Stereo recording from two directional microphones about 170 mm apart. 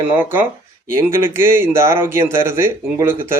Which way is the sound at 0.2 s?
10° right (ahead or behind).